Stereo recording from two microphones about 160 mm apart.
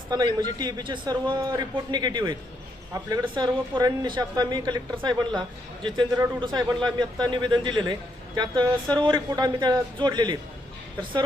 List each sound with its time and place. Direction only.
0.1 s speech: 25° right (ahead or behind)